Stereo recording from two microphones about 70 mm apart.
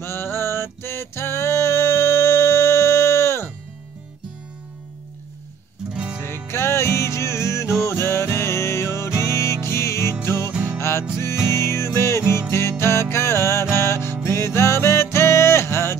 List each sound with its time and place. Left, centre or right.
0.0 s music: left
5.9 s music: centre
6.2 s music: left
10.5 s music: centre
10.8 s music: left